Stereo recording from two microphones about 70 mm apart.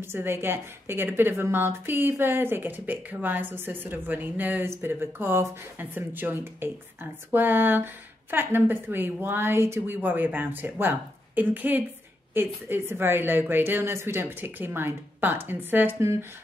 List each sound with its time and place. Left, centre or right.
0.0 s speech: right
16.0 s speech: right